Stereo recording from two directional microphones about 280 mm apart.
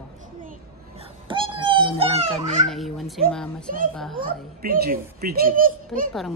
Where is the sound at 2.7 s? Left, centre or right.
Centre.